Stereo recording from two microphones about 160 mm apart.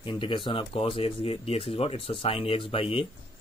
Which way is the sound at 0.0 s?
30° left (ahead or behind).